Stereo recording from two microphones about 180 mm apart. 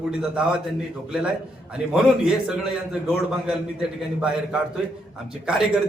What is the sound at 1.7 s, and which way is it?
A man's voice, 5° right (ahead or behind).